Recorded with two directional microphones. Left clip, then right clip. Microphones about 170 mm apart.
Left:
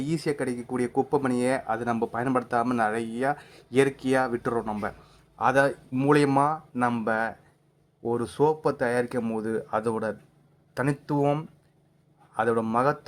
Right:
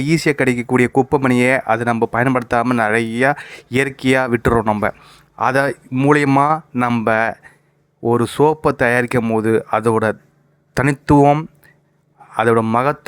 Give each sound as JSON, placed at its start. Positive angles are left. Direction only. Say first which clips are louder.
{"t": 0.0, "sound": "speech", "louder": "right 12 dB", "side_deg": -35}
{"t": 5.4, "sound": "speech", "louder": "right 6 dB", "side_deg": -30}